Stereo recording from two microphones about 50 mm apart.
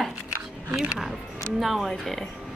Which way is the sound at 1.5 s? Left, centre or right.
Centre.